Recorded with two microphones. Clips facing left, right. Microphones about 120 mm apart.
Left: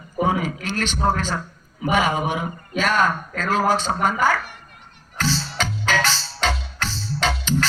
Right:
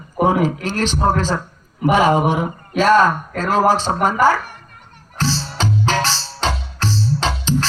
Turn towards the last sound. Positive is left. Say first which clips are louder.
# right 3 dB
turn(degrees=-35)  # may be behind; listen again after turning